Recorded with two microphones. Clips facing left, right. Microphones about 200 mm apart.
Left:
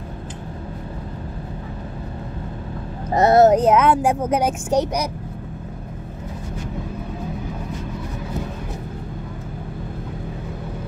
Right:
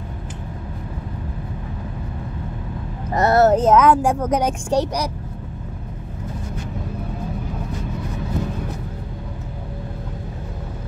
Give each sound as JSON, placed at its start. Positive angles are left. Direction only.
{"t": 3.2, "sound": "speech", "side_deg": 20}
{"t": 3.6, "sound": "speech", "side_deg": 5}